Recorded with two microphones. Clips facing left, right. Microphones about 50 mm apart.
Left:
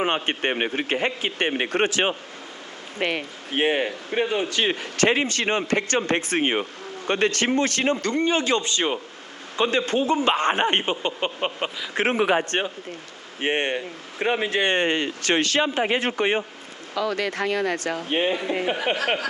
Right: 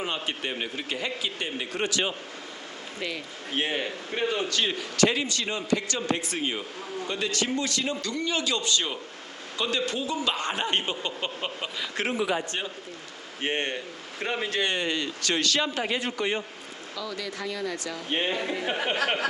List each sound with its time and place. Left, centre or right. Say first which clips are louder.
0.0 s speech: left 7 dB; left
1.8 s speech: left 5 dB; left
3.0 s speech: left 8 dB; left
3.5 s speech: left 7 dB; left
4.6 s speech: left 2 dB; left
12.0 s speech: left 7 dB; left
13.4 s speech: left 5 dB; left
16.9 s speech: left 10 dB; left
18.1 s speech: left 4 dB; centre